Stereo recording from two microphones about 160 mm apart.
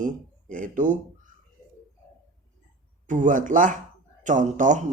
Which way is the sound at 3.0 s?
55° right (ahead or behind).